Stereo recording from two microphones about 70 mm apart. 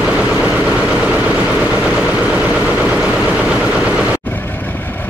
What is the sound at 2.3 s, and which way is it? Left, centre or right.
Vehicle, centre.